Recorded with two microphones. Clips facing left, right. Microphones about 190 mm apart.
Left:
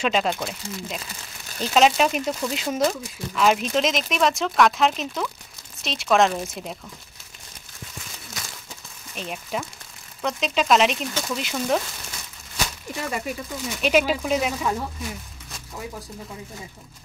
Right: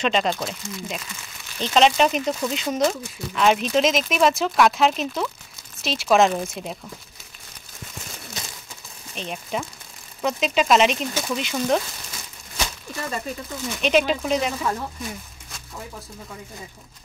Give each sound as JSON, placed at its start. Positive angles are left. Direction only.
{"t": 0.0, "sound": "speech", "side_deg": 5}
{"t": 9.1, "sound": "speech", "side_deg": 5}
{"t": 12.9, "sound": "speech", "side_deg": 15}